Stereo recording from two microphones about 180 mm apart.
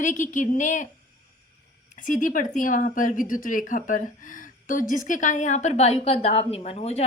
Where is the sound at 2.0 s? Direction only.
50° left (ahead or behind).